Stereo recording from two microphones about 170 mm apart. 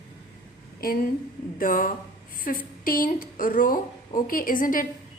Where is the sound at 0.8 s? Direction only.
60° left (ahead or behind).